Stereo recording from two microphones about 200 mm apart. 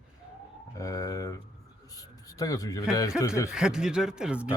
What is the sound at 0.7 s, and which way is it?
Speech, 15° left (ahead or behind).